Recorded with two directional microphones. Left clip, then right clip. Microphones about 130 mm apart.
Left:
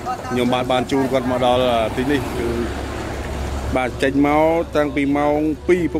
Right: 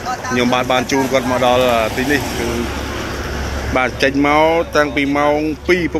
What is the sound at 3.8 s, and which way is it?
A man's voice, 20° left (ahead or behind).